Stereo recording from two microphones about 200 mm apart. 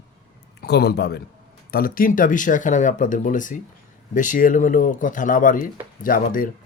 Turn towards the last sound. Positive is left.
turn(degrees=45)  # may be behind; listen again after turning